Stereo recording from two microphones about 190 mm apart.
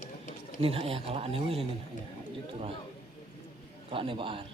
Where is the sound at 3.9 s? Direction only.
30° right (ahead or behind).